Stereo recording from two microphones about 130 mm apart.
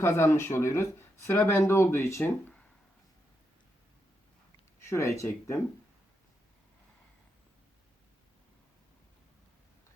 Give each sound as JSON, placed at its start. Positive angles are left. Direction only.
{"t": 0.0, "sound": "speech", "side_deg": 20}
{"t": 4.8, "sound": "speech", "side_deg": 20}